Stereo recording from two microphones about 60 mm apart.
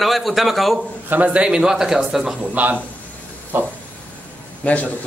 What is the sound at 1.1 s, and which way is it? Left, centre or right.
A man's voice, right.